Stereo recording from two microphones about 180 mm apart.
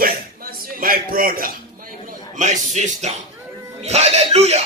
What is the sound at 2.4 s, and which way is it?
Speech, 40° right (ahead or behind).